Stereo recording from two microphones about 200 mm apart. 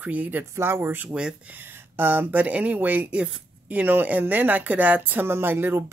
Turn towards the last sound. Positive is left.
turn(degrees=-10)  # may be behind; listen again after turning